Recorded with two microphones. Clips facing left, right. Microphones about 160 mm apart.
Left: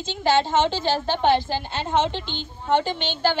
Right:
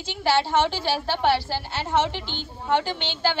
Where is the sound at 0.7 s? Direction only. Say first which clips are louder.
Left 3 dB; 10° right (ahead or behind).